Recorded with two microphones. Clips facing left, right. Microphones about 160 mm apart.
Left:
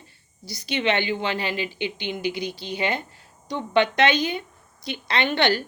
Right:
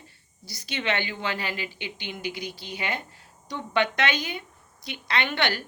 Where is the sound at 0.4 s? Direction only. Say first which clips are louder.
Left 5 dB; 20° left (ahead or behind).